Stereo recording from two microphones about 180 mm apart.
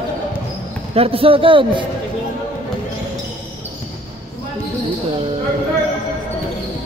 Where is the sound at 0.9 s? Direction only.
30° right (ahead or behind).